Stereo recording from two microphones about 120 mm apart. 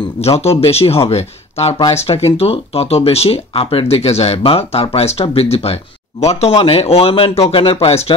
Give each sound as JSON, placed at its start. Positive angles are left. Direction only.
{"t": 0.2, "sound": "speech", "side_deg": 60}